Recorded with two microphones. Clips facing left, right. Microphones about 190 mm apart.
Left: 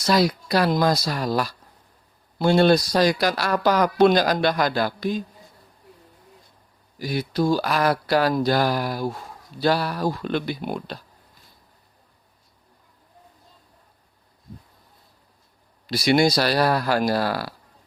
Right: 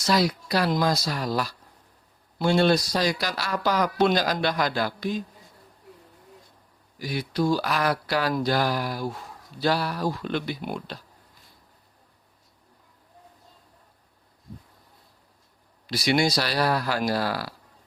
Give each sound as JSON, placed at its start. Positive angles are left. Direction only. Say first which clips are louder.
{"t": 0.0, "sound": "speech", "louder": "left 3 dB", "side_deg": 55}
{"t": 7.0, "sound": "speech", "louder": "left 3 dB", "side_deg": 40}
{"t": 15.9, "sound": "speech", "louder": "left 4 dB", "side_deg": 50}